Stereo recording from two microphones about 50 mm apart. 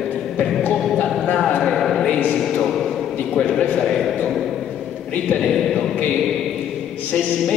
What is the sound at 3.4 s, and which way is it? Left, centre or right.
Speech, left.